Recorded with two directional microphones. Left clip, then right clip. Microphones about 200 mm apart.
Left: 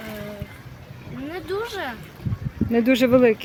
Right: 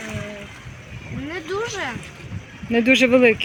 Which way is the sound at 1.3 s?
20° left (ahead or behind).